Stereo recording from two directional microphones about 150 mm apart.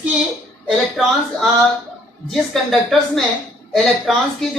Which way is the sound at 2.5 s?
Centre (ahead or behind).